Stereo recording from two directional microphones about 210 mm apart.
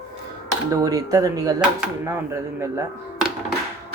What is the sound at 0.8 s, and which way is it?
Speech, 15° right (ahead or behind).